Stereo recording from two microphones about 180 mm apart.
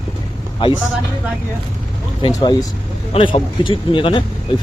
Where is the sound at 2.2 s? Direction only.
25° left (ahead or behind).